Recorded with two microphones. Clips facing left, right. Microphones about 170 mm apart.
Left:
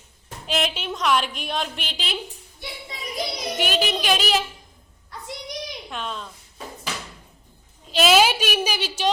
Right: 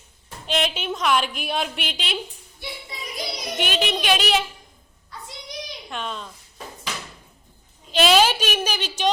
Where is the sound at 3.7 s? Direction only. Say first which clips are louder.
Right 1 dB; 5° left (ahead or behind).